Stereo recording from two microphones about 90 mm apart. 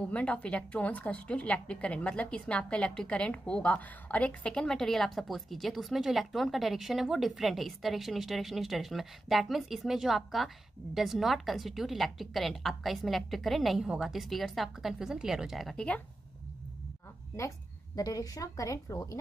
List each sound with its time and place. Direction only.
0.0 s a woman's voice: 15° left (ahead or behind)
17.9 s a woman's voice: 45° left (ahead or behind)